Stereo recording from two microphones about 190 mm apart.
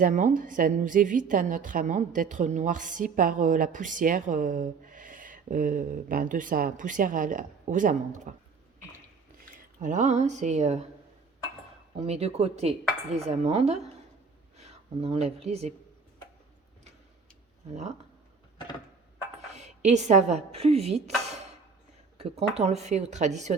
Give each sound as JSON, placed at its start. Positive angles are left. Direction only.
{"t": 0.0, "sound": "a woman's voice", "side_deg": -40}
{"t": 9.8, "sound": "speech", "side_deg": -40}
{"t": 11.9, "sound": "speech", "side_deg": -35}
{"t": 19.5, "sound": "a woman's voice", "side_deg": -35}
{"t": 22.2, "sound": "speech", "side_deg": -35}